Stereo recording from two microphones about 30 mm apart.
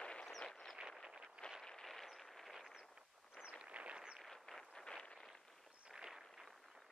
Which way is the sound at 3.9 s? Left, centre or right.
Right.